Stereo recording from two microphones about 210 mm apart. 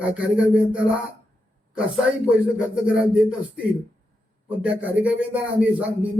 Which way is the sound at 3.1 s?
5° right (ahead or behind).